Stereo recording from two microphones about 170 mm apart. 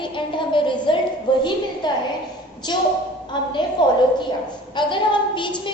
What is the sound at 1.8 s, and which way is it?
A woman's voice, 25° left (ahead or behind).